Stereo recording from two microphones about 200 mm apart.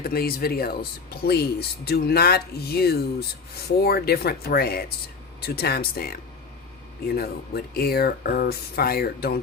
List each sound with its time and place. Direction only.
0.0 s speech: 50° left (ahead or behind)